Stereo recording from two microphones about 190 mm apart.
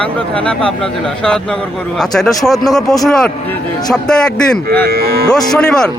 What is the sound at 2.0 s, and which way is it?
A man's voice, centre (ahead or behind).